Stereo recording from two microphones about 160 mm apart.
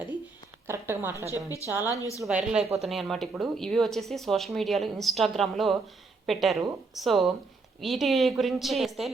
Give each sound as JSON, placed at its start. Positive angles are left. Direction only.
{"t": 0.7, "sound": "a woman's voice", "side_deg": -15}
{"t": 1.5, "sound": "a woman's voice", "side_deg": 20}
{"t": 2.2, "sound": "speech", "side_deg": -5}